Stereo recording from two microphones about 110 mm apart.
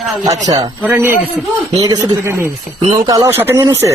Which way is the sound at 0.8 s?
20° right (ahead or behind).